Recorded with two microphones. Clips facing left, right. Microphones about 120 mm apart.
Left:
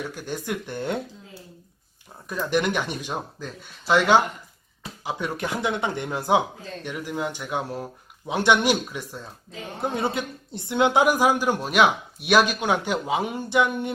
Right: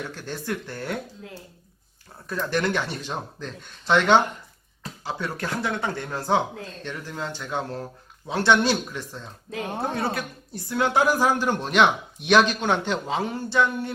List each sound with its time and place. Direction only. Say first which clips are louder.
0.0 s speech: left 2 dB; 10° left (ahead or behind)
2.3 s speech: left 1 dB; 15° left (ahead or behind)
9.5 s speech: right 8 dB; 65° right (ahead or behind)
9.8 s speech: left 4 dB; 20° left (ahead or behind)